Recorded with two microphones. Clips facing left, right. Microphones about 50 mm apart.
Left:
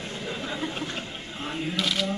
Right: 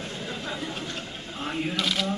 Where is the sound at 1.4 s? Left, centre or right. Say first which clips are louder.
Right 2 dB; right.